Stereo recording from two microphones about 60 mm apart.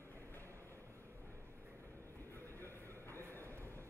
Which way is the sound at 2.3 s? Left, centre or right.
Left.